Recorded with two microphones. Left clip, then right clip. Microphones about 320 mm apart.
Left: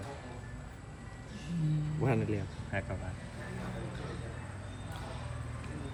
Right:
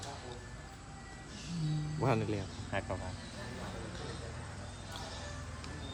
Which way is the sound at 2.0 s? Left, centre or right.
Centre.